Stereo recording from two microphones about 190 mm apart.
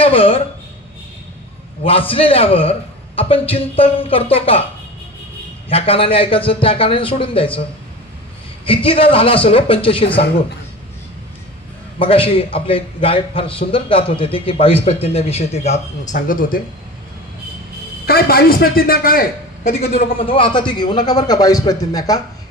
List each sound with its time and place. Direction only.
0.0 s speech: 30° left (ahead or behind)
1.9 s a man's voice: 30° left (ahead or behind)
5.7 s a man's voice: 30° left (ahead or behind)
8.6 s a man's voice: 30° left (ahead or behind)
12.0 s a man's voice: 30° left (ahead or behind); by 16.6 s 45° left (ahead or behind)
18.0 s a man's voice: 55° left (ahead or behind); by 22.2 s 20° left (ahead or behind)